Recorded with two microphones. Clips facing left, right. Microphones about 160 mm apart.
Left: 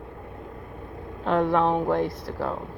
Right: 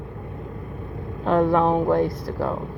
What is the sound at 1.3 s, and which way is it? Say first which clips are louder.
Speech: right 3 dB; 45° right (ahead or behind).